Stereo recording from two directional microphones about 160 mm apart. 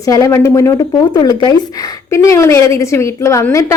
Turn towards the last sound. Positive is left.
turn(degrees=20)  # may be behind; listen again after turning